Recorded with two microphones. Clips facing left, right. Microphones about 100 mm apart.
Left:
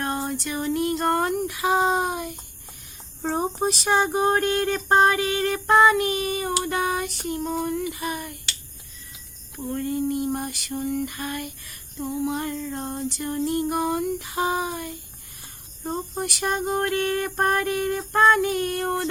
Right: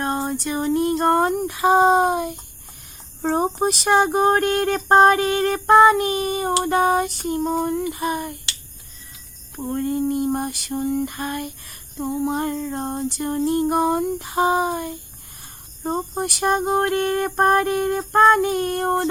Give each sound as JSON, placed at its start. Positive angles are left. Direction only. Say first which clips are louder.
{"t": 0.0, "sound": "a sound", "louder": "right 4 dB", "side_deg": -30}
{"t": 3.2, "sound": "speech", "louder": "right 4 dB", "side_deg": -60}
{"t": 9.6, "sound": "speech", "louder": "right 3 dB", "side_deg": -35}
{"t": 11.9, "sound": "female singing", "louder": "right 3 dB", "side_deg": -55}
{"t": 12.3, "sound": "speech", "louder": "right 4 dB", "side_deg": -35}